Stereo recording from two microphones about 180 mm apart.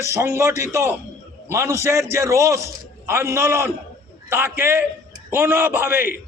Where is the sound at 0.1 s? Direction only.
15° right (ahead or behind).